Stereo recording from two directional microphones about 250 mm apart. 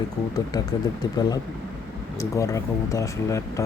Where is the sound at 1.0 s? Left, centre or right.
Centre.